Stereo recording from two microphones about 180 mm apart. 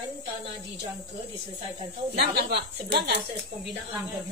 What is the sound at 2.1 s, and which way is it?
Speech, 60° right (ahead or behind).